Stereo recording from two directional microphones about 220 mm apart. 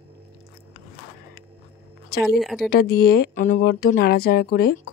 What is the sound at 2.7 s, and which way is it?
Speech, 45° left (ahead or behind).